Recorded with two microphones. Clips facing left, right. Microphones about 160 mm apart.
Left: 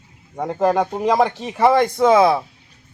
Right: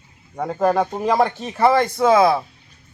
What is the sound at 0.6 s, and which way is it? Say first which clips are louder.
Speech: left 1 dB; 15° left (ahead or behind).